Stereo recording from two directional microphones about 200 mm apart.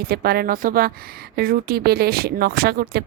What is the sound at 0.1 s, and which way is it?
Speech, 50° right (ahead or behind).